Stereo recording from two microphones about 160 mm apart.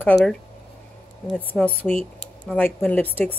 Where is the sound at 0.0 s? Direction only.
10° left (ahead or behind).